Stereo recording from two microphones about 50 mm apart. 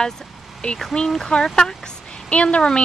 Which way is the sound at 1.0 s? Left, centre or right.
Centre.